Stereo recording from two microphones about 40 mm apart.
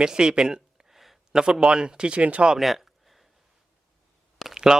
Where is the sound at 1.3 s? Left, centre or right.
Centre; by 2.5 s right.